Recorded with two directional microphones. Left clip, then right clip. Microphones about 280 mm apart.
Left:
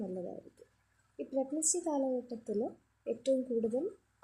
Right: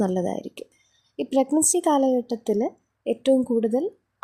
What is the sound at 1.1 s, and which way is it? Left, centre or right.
Speech, right.